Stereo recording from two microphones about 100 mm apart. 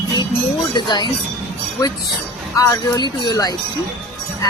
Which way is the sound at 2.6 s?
35° left (ahead or behind).